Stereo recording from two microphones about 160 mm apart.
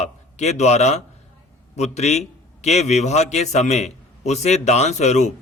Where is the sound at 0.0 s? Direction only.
45° left (ahead or behind).